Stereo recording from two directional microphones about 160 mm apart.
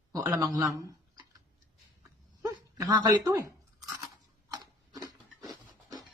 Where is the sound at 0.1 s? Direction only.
20° right (ahead or behind).